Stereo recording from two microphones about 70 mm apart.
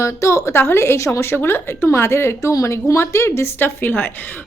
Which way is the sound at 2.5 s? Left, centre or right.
Left.